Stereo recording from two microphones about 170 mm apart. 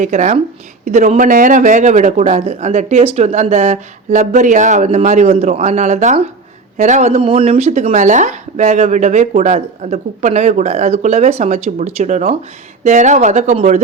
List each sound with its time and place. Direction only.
0.0 s a man's voice: 45° right (ahead or behind)